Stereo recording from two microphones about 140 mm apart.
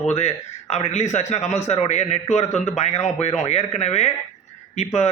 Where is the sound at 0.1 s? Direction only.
50° left (ahead or behind).